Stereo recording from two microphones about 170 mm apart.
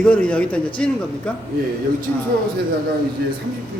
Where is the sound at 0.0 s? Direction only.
5° left (ahead or behind).